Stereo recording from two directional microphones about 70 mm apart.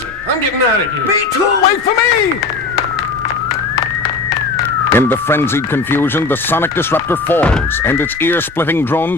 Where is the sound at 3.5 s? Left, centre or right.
Left.